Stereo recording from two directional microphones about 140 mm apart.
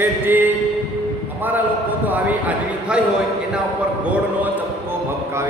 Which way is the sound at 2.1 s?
10° right (ahead or behind).